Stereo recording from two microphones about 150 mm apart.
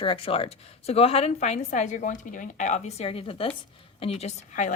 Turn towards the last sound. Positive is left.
turn(degrees=50)  # may be behind; listen again after turning